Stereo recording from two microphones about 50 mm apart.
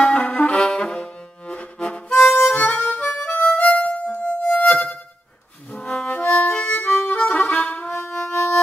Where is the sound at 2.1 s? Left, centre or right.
Left.